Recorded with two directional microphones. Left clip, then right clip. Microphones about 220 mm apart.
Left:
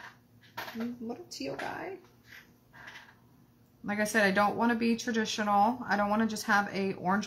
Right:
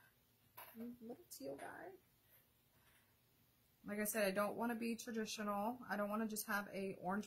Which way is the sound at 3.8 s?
45° right (ahead or behind).